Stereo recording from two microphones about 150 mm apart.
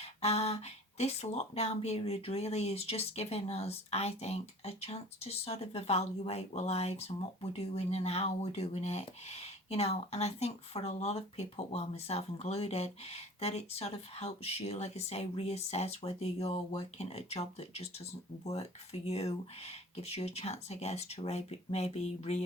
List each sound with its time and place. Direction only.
0.0 s speech: 45° left (ahead or behind)